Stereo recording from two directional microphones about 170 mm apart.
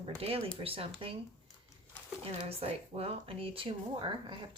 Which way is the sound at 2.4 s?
35° right (ahead or behind).